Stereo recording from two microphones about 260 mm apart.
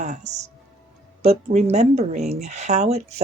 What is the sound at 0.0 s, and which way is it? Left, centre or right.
Speech, right.